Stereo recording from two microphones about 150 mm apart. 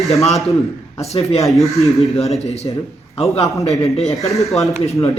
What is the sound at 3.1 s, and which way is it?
Speech, 40° left (ahead or behind).